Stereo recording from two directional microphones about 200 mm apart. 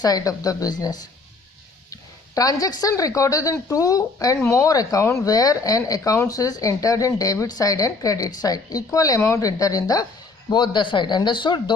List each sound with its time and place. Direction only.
0.0 s speech: 20° left (ahead or behind)